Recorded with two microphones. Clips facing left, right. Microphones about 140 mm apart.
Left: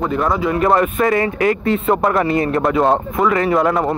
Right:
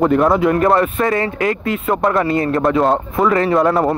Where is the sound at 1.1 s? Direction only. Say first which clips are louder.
Left 2 dB; 25° left (ahead or behind).